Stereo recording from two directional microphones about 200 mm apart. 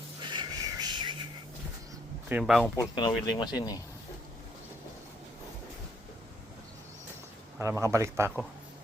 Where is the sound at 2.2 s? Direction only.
5° right (ahead or behind).